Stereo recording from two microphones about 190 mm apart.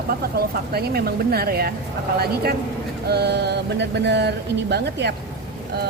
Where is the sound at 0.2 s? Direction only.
55° right (ahead or behind).